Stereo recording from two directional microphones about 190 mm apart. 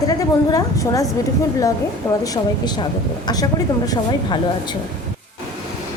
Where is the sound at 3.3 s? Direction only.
20° left (ahead or behind).